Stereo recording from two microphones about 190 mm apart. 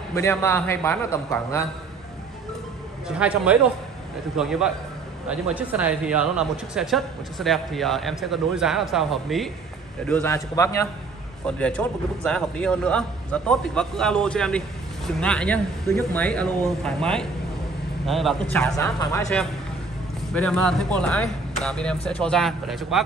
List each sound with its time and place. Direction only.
0.1 s a man's voice: 15° left (ahead or behind)
3.2 s a man's voice: 5° right (ahead or behind)
18.8 s a man's voice: 15° left (ahead or behind)
20.3 s speech: 5° left (ahead or behind)